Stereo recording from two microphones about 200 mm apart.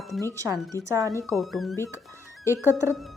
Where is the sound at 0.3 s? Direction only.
15° right (ahead or behind).